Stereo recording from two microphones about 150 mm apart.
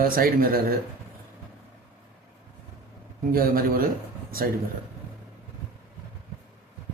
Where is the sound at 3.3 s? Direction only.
75° right (ahead or behind).